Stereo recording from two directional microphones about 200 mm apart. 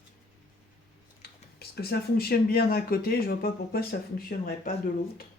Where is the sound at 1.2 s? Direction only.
50° left (ahead or behind).